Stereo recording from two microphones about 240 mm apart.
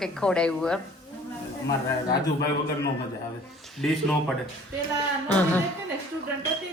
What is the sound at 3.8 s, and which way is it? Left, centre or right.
A woman's voice, centre.